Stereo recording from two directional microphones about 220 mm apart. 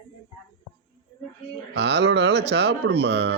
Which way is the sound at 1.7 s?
50° right (ahead or behind).